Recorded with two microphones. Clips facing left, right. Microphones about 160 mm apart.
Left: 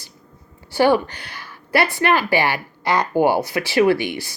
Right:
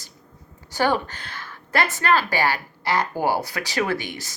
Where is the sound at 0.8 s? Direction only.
15° left (ahead or behind).